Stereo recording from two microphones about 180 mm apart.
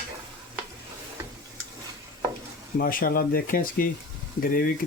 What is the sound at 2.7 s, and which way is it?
Speech, 55° left (ahead or behind).